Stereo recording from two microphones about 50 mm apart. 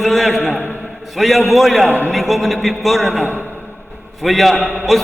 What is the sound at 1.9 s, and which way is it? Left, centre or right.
Speech, left.